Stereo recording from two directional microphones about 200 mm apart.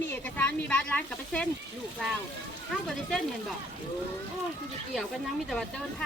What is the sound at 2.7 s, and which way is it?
Speech, centre (ahead or behind).